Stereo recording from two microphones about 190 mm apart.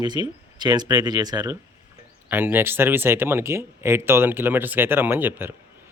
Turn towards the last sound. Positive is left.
turn(degrees=-10)  # may be behind; listen again after turning